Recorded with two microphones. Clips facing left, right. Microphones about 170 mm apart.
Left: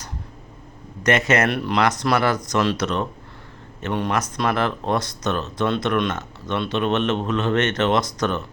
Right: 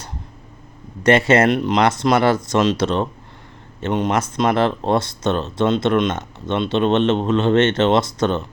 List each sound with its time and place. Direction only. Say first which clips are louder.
1.0 s speech: right 5 dB; 30° right (ahead or behind)